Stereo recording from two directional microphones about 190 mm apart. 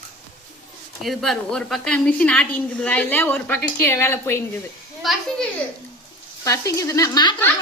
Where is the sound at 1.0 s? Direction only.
Centre (ahead or behind).